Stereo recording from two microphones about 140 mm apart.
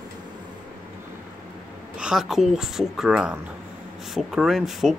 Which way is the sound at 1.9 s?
5° right (ahead or behind).